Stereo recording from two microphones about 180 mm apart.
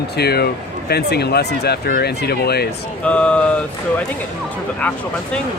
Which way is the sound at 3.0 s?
5° left (ahead or behind).